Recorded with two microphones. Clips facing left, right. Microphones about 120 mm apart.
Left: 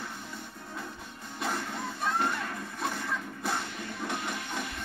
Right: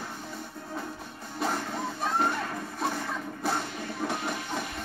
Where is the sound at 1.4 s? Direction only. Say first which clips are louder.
Right 3 dB; 35° right (ahead or behind).